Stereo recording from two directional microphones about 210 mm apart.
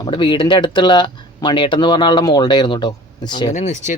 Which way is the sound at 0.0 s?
20° left (ahead or behind).